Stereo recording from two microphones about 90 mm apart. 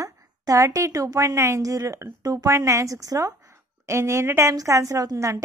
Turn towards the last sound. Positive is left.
turn(degrees=-40)  # may be behind; listen again after turning